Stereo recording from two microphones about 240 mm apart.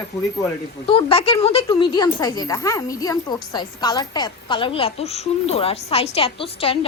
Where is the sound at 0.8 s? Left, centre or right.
Left.